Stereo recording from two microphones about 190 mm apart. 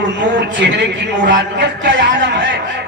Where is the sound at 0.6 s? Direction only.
60° right (ahead or behind).